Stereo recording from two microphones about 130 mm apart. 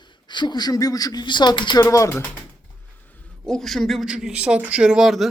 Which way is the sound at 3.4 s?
5° left (ahead or behind).